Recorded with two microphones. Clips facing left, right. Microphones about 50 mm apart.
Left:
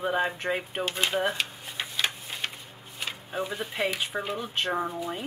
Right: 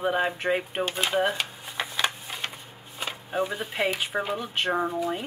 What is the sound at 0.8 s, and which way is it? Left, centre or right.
Speech, centre.